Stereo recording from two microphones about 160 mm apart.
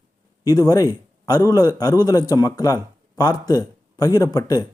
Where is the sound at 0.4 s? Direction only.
20° left (ahead or behind).